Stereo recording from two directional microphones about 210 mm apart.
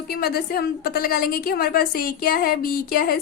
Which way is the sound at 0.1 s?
50° left (ahead or behind).